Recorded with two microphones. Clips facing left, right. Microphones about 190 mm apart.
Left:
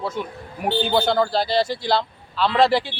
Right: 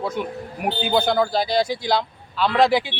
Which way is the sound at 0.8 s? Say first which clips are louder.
Even; centre (ahead or behind).